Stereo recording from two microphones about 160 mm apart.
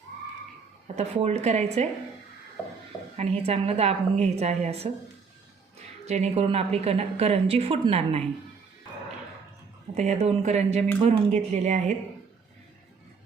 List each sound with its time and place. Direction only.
0.9 s speech: 40° right (ahead or behind)
3.2 s a woman's voice: 40° right (ahead or behind)
6.1 s a woman's voice: 40° right (ahead or behind)
9.9 s speech: 45° right (ahead or behind)